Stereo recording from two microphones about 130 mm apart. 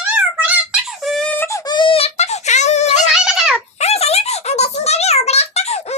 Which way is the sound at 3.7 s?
55° left (ahead or behind).